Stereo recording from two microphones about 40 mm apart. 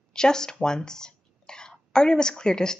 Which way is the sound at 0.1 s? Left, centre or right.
Centre.